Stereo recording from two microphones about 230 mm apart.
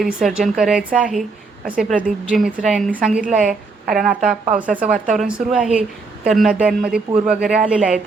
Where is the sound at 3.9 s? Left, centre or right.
Centre.